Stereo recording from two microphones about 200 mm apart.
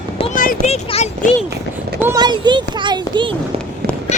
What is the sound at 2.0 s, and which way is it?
A child's voice, 15° right (ahead or behind).